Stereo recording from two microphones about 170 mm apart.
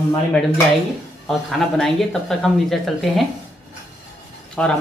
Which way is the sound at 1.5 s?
Centre (ahead or behind).